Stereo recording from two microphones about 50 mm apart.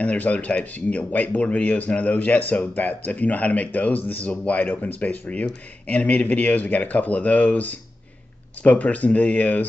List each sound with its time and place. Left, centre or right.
0.0 s speech: left